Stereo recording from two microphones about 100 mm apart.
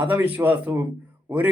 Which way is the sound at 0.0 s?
20° right (ahead or behind).